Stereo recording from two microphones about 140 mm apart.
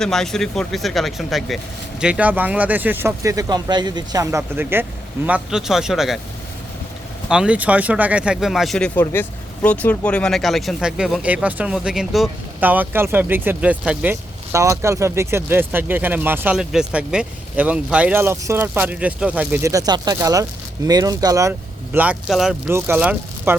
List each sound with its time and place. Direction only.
0.0 s speech: 5° left (ahead or behind)
7.3 s speech: 5° right (ahead or behind)
9.1 s speech: 15° left (ahead or behind); by 21.5 s 25° right (ahead or behind)
21.9 s speech: 10° right (ahead or behind)
22.6 s speech: 15° right (ahead or behind)